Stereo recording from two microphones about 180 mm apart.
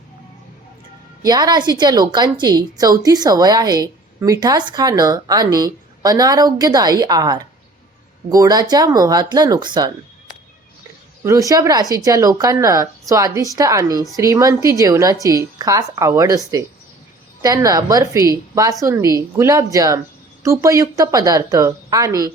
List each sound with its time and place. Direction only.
1.2 s a woman's voice: 20° right (ahead or behind)
11.2 s a woman's voice: 15° right (ahead or behind)
17.4 s a woman's voice: 20° right (ahead or behind)